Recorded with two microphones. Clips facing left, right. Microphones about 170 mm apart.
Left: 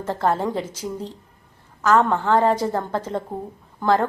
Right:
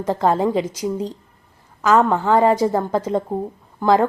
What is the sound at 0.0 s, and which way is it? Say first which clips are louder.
A woman's voice: right 4 dB; 15° right (ahead or behind).